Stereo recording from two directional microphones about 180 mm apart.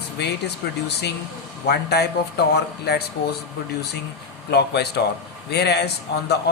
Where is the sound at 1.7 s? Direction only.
65° left (ahead or behind).